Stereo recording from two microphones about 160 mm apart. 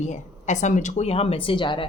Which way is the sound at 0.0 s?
50° left (ahead or behind).